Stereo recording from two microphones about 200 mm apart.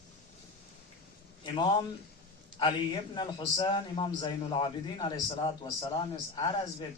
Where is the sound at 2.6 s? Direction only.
25° left (ahead or behind).